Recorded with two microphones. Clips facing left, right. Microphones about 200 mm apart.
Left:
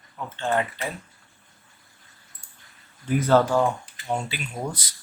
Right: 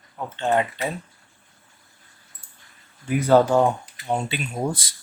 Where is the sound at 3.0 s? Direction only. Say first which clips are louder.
Right 2 dB; 10° right (ahead or behind).